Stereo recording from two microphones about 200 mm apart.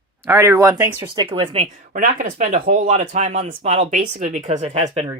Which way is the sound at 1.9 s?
40° right (ahead or behind).